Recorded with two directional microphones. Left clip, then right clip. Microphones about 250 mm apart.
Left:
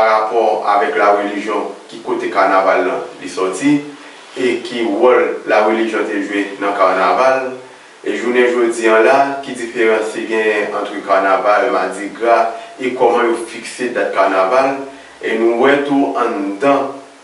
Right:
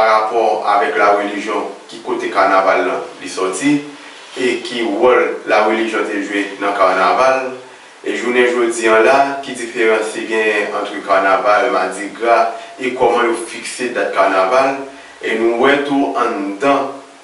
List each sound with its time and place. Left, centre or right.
0.0 s speech: centre
1.6 s speech: centre
2.2 s speech: centre